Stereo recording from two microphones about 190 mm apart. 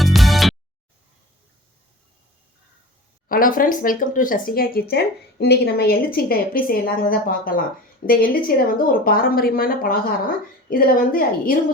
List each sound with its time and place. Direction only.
0.0 s music: centre (ahead or behind)
3.2 s speech: 50° left (ahead or behind)